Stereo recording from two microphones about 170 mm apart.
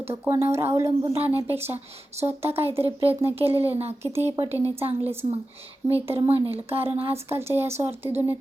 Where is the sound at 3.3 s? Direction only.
35° right (ahead or behind).